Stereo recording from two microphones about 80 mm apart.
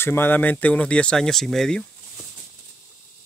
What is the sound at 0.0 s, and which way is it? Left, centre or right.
Speech, left.